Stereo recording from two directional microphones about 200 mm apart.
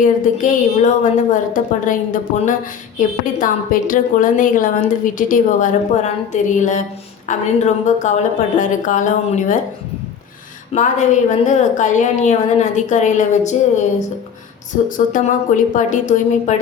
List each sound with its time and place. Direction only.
0.0 s a woman's voice: 40° left (ahead or behind)
10.8 s a woman's voice: 35° left (ahead or behind)
14.8 s a woman's voice: 40° left (ahead or behind)